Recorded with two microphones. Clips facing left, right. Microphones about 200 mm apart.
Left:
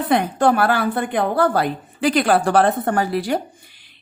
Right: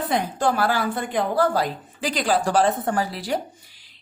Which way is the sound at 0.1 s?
60° left (ahead or behind).